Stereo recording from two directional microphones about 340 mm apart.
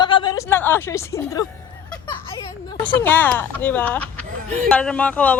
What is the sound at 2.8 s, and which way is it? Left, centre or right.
Speech, centre.